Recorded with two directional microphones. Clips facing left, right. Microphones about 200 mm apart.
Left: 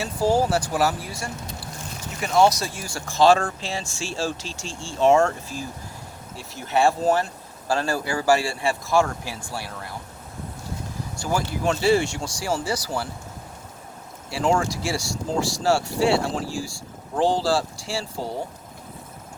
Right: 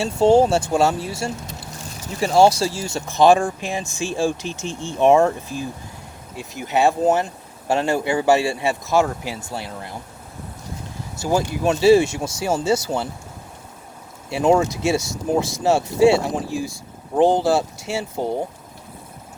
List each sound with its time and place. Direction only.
0.0 s speech: 25° right (ahead or behind)
11.2 s speech: 20° right (ahead or behind)
14.3 s speech: 20° right (ahead or behind)